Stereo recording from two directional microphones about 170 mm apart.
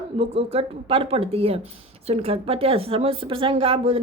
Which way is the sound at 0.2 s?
35° right (ahead or behind).